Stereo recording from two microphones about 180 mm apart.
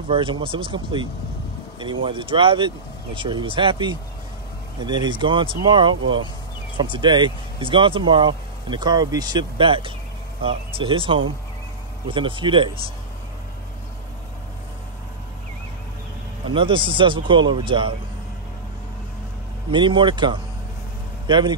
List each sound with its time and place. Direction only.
0.1 s speech: 30° right (ahead or behind)
16.4 s speech: 30° right (ahead or behind)
19.7 s speech: 25° right (ahead or behind)